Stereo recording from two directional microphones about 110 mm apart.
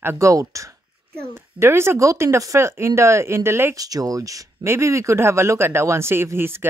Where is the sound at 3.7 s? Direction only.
35° right (ahead or behind).